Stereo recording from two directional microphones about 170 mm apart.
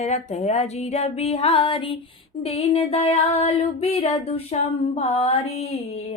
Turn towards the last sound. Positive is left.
turn(degrees=35)  # may be behind; listen again after turning